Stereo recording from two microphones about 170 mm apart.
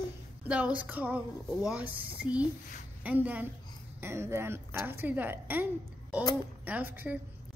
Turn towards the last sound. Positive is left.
turn(degrees=-10)  # may be behind; listen again after turning